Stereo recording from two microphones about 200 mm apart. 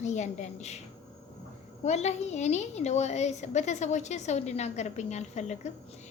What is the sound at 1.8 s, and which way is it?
A woman's voice, 35° left (ahead or behind).